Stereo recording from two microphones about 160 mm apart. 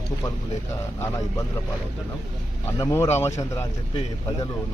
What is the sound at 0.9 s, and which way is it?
Speech, 15° left (ahead or behind).